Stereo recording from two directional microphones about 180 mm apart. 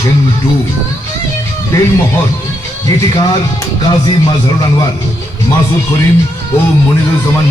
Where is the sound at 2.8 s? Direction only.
20° left (ahead or behind).